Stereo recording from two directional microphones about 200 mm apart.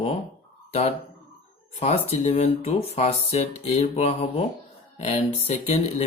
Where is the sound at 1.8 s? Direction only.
35° left (ahead or behind).